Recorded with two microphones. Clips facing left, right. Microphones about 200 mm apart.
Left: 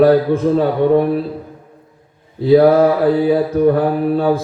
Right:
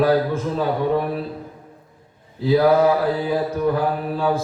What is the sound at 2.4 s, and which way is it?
Mantra, 55° left (ahead or behind).